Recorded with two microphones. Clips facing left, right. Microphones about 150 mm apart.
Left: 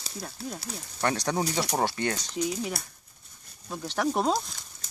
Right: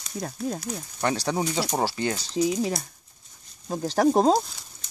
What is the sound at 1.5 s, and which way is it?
Speech, 10° right (ahead or behind).